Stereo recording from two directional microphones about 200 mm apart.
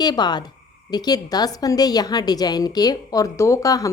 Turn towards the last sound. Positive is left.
turn(degrees=15)  # may be behind; listen again after turning